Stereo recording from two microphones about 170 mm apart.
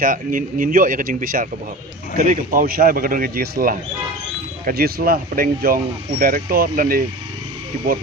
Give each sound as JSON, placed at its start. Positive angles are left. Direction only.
{"t": 0.0, "sound": "speech", "side_deg": -55}